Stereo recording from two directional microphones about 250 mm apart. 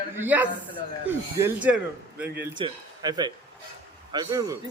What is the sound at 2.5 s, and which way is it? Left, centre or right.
A man's voice, centre.